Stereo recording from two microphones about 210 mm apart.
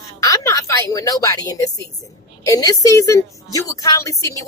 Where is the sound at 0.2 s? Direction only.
15° left (ahead or behind).